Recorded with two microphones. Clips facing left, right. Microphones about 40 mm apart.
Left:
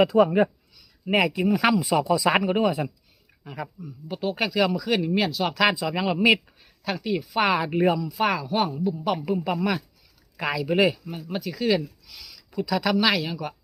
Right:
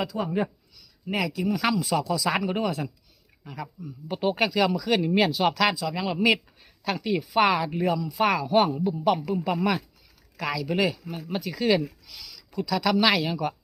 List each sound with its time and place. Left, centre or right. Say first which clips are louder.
0.0 s speech: left 11 dB; left
0.3 s a sound: left 6 dB; centre
1.6 s speech: left 3 dB; centre
4.1 s speech: right 2 dB; centre
4.4 s speech: left 2 dB; centre
5.5 s speech: left 2 dB; centre
6.1 s speech: left 2 dB; centre
7.6 s speech: left 4 dB; left
7.9 s speech: right 1 dB; centre
9.2 s speech: even; centre
10.3 s speech: left 4 dB; centre
11.3 s speech: even; centre